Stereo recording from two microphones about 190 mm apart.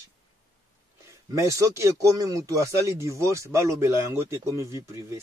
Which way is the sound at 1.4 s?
15° right (ahead or behind).